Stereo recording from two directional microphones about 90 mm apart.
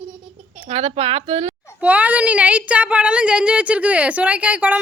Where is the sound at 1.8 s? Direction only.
15° right (ahead or behind).